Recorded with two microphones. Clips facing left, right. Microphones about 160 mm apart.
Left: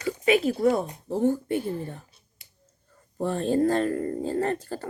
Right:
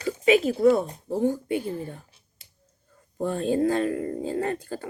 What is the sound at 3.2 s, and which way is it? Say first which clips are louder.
Speech: even; 10° right (ahead or behind).